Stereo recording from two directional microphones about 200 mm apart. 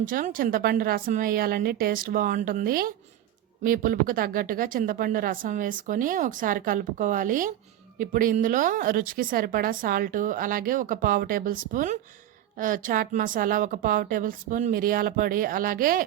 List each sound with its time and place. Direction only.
0.0 s speech: 45° right (ahead or behind)